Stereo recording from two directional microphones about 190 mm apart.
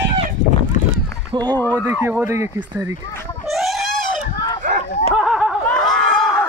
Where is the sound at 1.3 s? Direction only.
25° right (ahead or behind).